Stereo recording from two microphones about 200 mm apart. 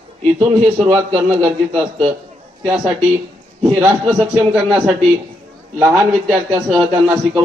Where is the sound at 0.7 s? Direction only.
10° right (ahead or behind).